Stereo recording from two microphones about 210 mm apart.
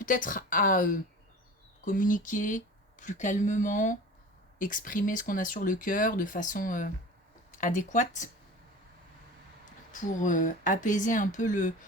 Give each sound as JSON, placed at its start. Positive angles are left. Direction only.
{"t": 0.0, "sound": "speech", "side_deg": 40}
{"t": 9.9, "sound": "speech", "side_deg": 35}